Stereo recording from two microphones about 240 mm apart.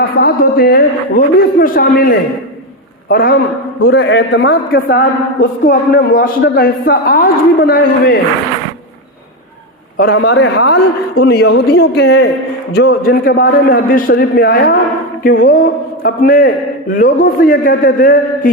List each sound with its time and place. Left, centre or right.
0.2 s a man's voice: left
10.0 s a man's voice: left